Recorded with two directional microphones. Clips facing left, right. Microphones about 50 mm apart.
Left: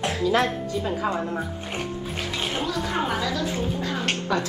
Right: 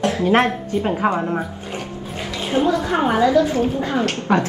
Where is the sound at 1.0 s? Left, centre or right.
Right.